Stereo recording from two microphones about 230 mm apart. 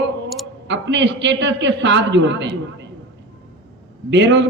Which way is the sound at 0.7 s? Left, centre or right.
Right.